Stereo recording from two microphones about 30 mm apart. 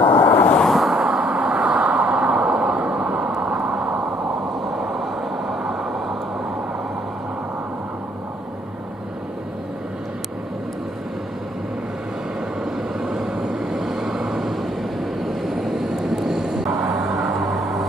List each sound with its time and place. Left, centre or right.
0.0 s vehicle: left
0.7 s vehicle: centre
0.9 s vehicle: right
1.6 s vehicle: right
2.5 s vehicle: right
4.9 s vehicle: centre
12.7 s vehicle: centre
14.5 s vehicle: centre